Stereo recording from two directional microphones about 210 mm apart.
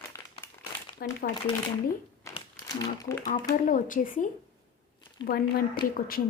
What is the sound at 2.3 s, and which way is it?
Crumpling, 15° left (ahead or behind).